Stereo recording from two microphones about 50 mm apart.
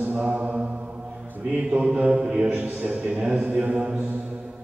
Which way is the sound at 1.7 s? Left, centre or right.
Centre.